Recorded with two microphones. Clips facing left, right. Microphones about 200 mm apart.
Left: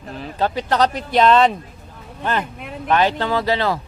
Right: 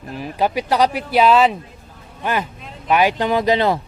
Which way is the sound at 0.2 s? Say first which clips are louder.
Right 2 dB; 10° right (ahead or behind).